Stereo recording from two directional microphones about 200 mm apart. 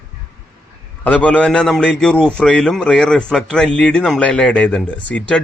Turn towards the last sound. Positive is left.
turn(degrees=5)  # may be behind; listen again after turning